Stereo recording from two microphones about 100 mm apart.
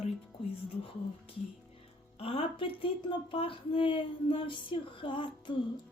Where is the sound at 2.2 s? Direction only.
70° left (ahead or behind).